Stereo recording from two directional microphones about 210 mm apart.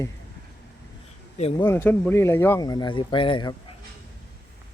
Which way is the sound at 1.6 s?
10° left (ahead or behind).